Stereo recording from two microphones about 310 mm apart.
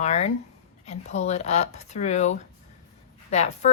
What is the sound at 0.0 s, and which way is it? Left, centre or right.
A woman's voice, left.